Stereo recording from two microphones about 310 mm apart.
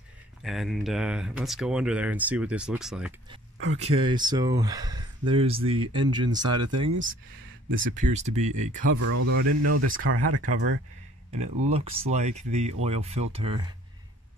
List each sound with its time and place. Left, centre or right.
0.4 s speech: centre
3.5 s speech: right
3.8 s speech: centre
6.5 s speech: right
7.8 s speech: right
8.9 s speech: right
9.5 s speech: right
11.7 s speech: right